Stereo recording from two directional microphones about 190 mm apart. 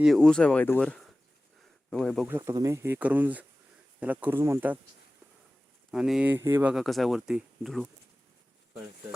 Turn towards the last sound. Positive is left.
turn(degrees=0)  # may be behind; listen again after turning